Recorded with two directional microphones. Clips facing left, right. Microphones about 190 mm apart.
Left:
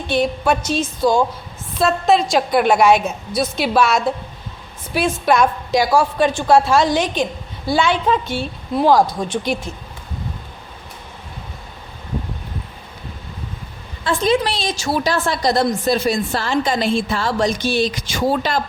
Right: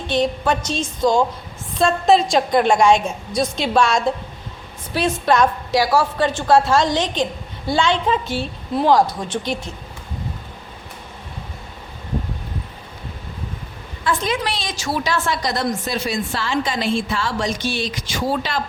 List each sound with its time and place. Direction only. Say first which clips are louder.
0.1 s a woman's voice: left 1 dB; 10° left (ahead or behind)
8.9 s a woman's voice: left 1 dB; 10° left (ahead or behind)
14.0 s a woman's voice: left 5 dB; 30° left (ahead or behind)